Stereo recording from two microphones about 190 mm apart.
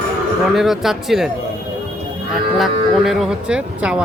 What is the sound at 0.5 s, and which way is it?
Speech, centre (ahead or behind).